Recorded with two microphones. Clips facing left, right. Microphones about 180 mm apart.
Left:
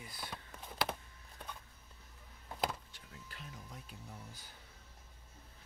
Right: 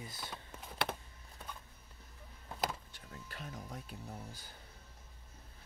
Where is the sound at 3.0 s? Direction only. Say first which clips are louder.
Right 5 dB; 55° right (ahead or behind).